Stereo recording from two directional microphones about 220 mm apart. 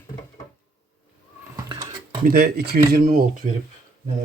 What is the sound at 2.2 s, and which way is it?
Speech, 45° right (ahead or behind).